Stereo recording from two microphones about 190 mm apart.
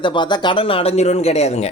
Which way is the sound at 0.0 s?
25° left (ahead or behind).